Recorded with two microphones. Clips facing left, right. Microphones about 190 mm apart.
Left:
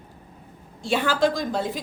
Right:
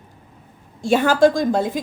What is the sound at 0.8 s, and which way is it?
Speech, 45° right (ahead or behind).